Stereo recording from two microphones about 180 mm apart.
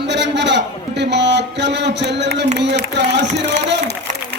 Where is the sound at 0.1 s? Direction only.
75° right (ahead or behind).